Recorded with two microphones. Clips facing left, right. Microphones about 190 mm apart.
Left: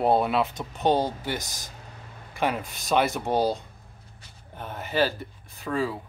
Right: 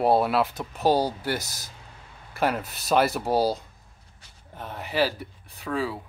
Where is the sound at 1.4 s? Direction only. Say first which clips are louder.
Even; 15° left (ahead or behind).